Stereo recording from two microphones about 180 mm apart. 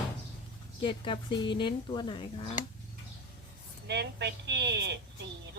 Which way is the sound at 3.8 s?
70° right (ahead or behind).